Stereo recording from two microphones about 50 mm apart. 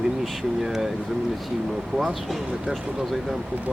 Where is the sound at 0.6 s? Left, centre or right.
Centre.